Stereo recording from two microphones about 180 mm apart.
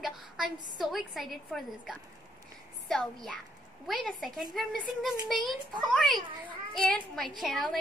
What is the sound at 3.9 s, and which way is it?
A child's voice, centre (ahead or behind).